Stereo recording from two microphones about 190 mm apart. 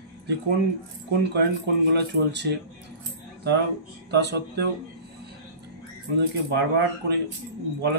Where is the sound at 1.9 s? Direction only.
60° right (ahead or behind).